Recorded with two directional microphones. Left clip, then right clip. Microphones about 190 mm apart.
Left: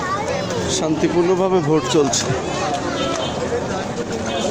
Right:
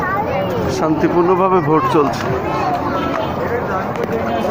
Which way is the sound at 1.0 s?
30° left (ahead or behind).